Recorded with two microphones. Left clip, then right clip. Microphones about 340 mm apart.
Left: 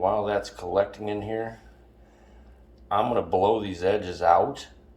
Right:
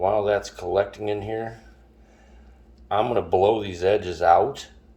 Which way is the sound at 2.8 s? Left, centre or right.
Right.